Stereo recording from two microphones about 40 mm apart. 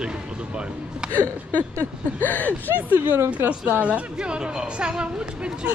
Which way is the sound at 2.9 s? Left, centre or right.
Right.